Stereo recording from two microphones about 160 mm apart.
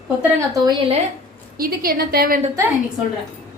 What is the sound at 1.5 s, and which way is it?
Speech, 65° right (ahead or behind).